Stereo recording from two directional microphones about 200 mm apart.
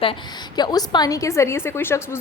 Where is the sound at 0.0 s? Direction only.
25° left (ahead or behind).